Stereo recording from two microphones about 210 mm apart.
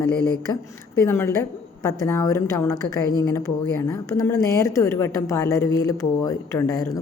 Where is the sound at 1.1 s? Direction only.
10° left (ahead or behind).